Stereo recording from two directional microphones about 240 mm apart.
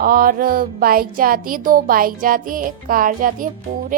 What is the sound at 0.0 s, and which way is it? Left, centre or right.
A woman's voice, right.